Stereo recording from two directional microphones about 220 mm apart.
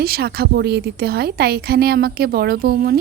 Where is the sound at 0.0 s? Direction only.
45° right (ahead or behind).